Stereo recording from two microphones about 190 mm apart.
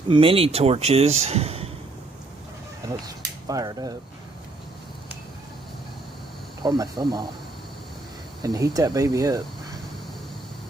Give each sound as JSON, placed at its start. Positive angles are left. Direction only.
{"t": 0.1, "sound": "a man's voice", "side_deg": -30}
{"t": 3.4, "sound": "speech", "side_deg": -20}
{"t": 6.6, "sound": "speech", "side_deg": -20}
{"t": 8.4, "sound": "speech", "side_deg": -20}